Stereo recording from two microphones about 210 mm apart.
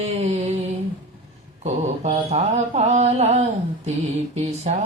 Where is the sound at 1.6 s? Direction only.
30° right (ahead or behind).